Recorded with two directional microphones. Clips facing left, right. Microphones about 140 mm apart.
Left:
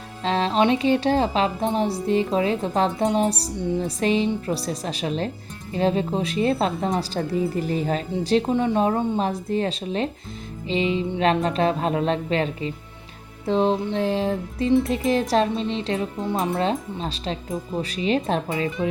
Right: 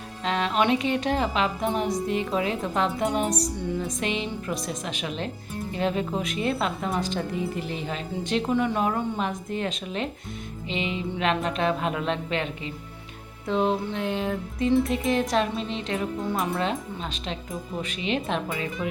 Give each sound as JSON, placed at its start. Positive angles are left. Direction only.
{"t": 0.3, "sound": "music", "side_deg": 30}